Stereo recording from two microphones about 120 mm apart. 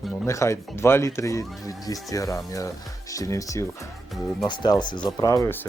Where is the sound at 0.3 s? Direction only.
25° left (ahead or behind).